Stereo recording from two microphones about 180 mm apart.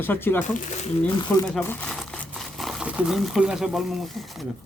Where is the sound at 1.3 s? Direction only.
10° left (ahead or behind).